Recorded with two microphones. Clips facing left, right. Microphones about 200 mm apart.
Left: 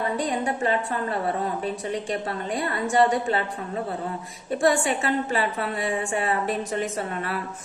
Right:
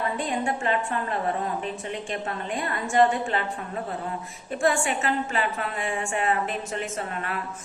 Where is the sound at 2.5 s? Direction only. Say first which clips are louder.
Left 3 dB; 35° left (ahead or behind).